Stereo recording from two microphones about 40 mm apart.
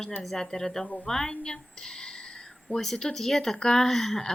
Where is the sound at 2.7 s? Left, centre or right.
Centre.